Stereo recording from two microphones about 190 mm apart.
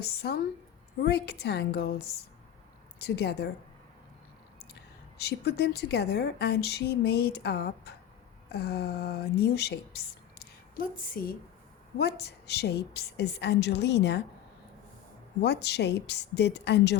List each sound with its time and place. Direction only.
0.0 s a woman's voice: 60° left (ahead or behind)
4.7 s a woman's voice: 60° left (ahead or behind)
10.4 s a sound: 50° left (ahead or behind)
11.9 s a woman's voice: 60° left (ahead or behind)
15.4 s a woman's voice: 60° left (ahead or behind)